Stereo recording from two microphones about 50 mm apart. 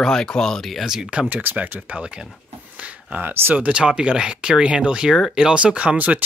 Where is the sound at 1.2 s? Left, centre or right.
Right.